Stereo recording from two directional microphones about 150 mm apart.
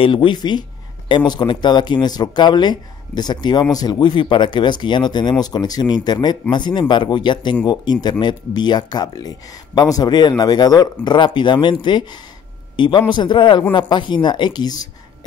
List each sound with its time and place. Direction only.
0.0 s a man's voice: 35° left (ahead or behind)